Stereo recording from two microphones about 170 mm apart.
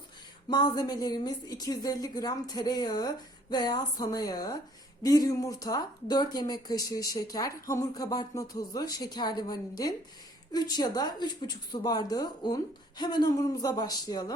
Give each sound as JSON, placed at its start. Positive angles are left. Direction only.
{"t": 0.5, "sound": "speech", "side_deg": 25}